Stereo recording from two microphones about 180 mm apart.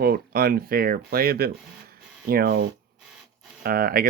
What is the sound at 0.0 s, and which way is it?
Speech, 55° right (ahead or behind).